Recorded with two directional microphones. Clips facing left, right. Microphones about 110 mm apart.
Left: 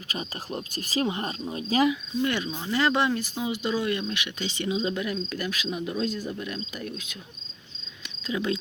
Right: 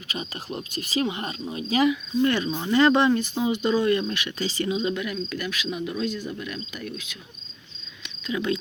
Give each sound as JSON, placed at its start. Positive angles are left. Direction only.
{"t": 0.1, "sound": "speech", "side_deg": 40}
{"t": 2.2, "sound": "speech", "side_deg": 10}
{"t": 8.3, "sound": "speech", "side_deg": 25}